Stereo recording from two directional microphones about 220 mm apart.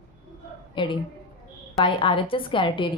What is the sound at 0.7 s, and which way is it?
A woman's voice, 20° left (ahead or behind).